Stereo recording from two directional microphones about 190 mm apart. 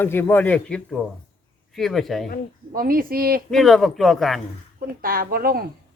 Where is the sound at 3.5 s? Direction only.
Centre (ahead or behind).